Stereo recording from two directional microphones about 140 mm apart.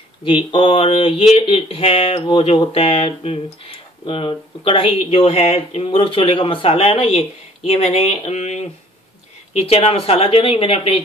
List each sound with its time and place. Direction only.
0.2 s a woman's voice: 35° left (ahead or behind)